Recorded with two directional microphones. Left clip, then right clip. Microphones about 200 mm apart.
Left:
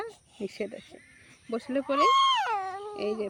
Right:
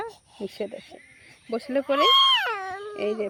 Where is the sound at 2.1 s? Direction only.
Centre (ahead or behind).